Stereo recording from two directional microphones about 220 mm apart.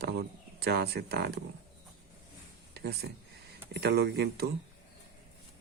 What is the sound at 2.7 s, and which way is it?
Speech, 45° right (ahead or behind).